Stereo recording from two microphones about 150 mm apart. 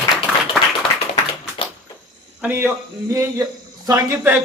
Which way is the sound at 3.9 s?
20° right (ahead or behind).